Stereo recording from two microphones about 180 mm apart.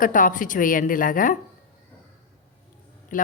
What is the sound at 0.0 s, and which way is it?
A woman's voice, 45° left (ahead or behind).